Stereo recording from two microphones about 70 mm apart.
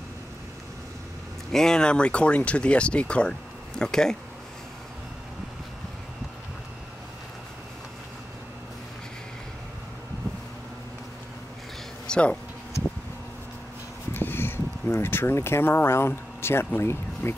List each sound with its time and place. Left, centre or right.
1.5 s speech: centre
12.1 s speech: centre
14.1 s speech: left